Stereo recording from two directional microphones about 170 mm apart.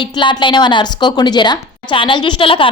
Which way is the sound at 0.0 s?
30° left (ahead or behind).